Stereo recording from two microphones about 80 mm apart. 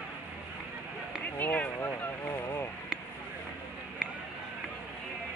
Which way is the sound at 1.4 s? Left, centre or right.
Left.